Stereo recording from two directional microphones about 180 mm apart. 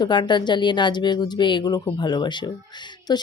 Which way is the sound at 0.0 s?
25° left (ahead or behind).